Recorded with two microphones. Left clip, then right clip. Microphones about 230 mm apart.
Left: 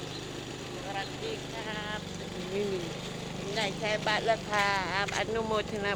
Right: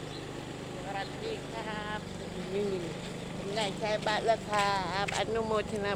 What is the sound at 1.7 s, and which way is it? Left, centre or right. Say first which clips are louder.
Vehicle: left 1 dB; centre.